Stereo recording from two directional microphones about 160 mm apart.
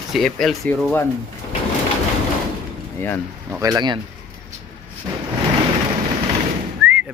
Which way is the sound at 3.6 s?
25° right (ahead or behind).